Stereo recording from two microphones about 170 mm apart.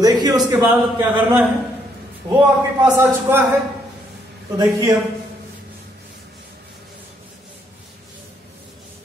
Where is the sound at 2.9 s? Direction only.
15° right (ahead or behind).